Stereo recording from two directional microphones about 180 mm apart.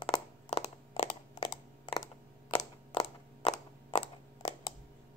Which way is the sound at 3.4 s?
40° left (ahead or behind).